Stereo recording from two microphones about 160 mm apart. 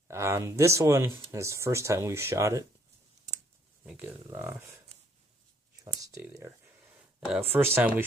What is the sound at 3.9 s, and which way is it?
Speech, 10° right (ahead or behind).